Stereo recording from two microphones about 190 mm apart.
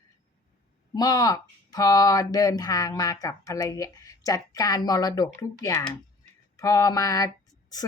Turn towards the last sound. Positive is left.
turn(degrees=20)  # may be behind; listen again after turning